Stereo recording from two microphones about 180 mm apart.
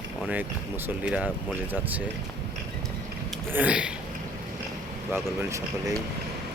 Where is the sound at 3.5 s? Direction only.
10° right (ahead or behind).